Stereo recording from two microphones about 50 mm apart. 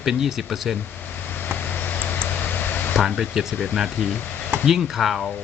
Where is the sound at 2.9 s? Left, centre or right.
Centre.